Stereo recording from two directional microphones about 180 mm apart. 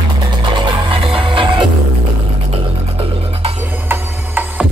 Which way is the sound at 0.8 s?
30° right (ahead or behind).